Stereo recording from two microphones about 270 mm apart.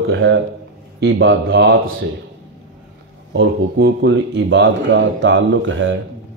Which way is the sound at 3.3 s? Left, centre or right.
Right.